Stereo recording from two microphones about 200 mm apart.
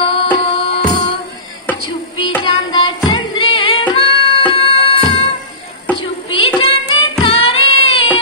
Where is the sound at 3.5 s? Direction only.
25° left (ahead or behind).